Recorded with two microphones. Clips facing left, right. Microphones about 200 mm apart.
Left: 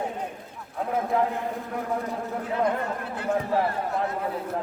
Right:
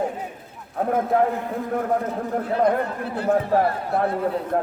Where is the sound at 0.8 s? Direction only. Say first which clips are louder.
Right 5 dB; 50° right (ahead or behind).